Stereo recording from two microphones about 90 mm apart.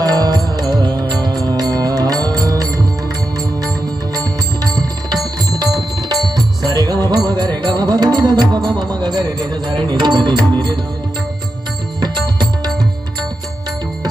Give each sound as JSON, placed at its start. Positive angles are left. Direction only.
{"t": 0.0, "sound": "music", "side_deg": -45}
{"t": 4.2, "sound": "music", "side_deg": -45}
{"t": 11.9, "sound": "music", "side_deg": -55}